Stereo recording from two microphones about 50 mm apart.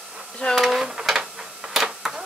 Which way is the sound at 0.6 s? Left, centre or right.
Centre.